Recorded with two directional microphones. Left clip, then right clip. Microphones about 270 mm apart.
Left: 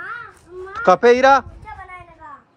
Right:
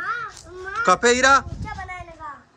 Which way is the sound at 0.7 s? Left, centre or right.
Centre.